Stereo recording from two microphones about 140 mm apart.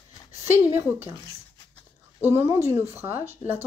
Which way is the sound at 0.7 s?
15° right (ahead or behind).